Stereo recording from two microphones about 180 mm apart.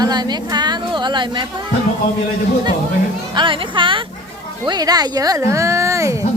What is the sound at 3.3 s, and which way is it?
A woman's voice, 25° right (ahead or behind).